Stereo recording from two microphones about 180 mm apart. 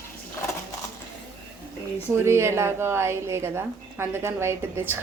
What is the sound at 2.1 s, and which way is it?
A woman's voice, 15° right (ahead or behind).